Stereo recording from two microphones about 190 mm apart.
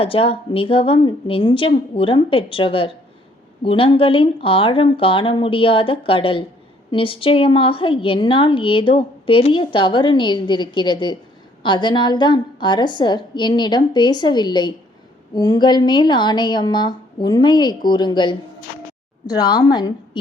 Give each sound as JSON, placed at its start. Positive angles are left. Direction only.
{"t": 0.0, "sound": "a woman's voice", "side_deg": 30}